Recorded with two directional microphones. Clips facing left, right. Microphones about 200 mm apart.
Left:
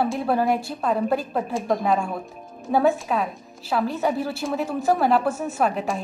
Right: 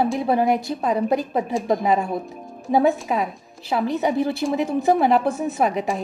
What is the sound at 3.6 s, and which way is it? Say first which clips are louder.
A woman's voice: right 2 dB; 15° right (ahead or behind).